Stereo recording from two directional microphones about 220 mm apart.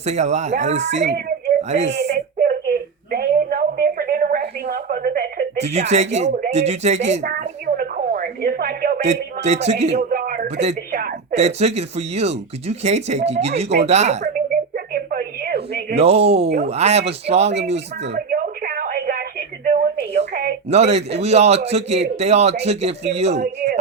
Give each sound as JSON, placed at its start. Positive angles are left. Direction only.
{"t": 0.0, "sound": "speech", "side_deg": -30}
{"t": 1.9, "sound": "a sound", "side_deg": -50}
{"t": 5.6, "sound": "speech", "side_deg": -30}
{"t": 6.2, "sound": "speech", "side_deg": -45}
{"t": 6.5, "sound": "a sound", "side_deg": -30}
{"t": 10.4, "sound": "speech", "side_deg": -30}
{"t": 10.9, "sound": "speech", "side_deg": -40}
{"t": 14.9, "sound": "a sound", "side_deg": -40}
{"t": 16.0, "sound": "a man's voice", "side_deg": -25}
{"t": 16.3, "sound": "speech", "side_deg": -50}
{"t": 16.6, "sound": "a man's voice", "side_deg": -30}
{"t": 18.3, "sound": "a sound", "side_deg": -40}
{"t": 20.7, "sound": "a man's voice", "side_deg": -30}